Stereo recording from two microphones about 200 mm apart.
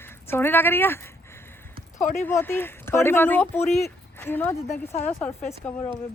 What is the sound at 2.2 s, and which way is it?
Speech, 10° left (ahead or behind).